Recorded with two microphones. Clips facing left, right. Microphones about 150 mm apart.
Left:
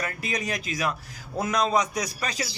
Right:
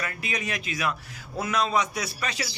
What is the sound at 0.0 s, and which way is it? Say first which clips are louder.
A man's voice: left 2 dB; 40° left (ahead or behind).